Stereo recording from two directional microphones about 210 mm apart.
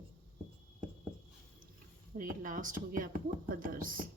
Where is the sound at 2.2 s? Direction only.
40° right (ahead or behind).